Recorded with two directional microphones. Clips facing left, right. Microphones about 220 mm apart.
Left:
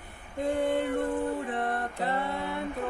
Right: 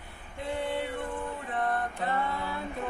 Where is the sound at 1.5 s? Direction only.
30° left (ahead or behind).